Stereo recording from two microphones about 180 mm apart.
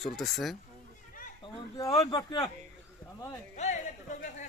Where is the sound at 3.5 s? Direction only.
40° left (ahead or behind).